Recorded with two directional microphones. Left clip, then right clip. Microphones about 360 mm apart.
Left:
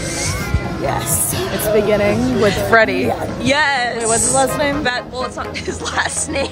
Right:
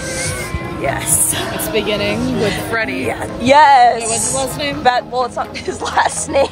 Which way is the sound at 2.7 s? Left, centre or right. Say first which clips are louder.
Left 7 dB; centre.